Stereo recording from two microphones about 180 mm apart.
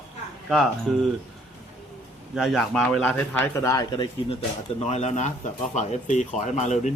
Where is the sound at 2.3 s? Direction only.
Centre (ahead or behind); by 4.0 s 20° left (ahead or behind).